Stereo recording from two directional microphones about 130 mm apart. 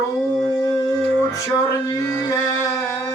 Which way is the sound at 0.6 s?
20° left (ahead or behind).